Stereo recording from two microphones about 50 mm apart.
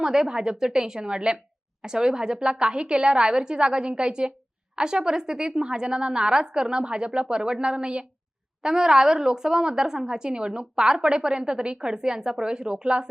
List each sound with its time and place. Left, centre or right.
0.0 s a woman's voice: centre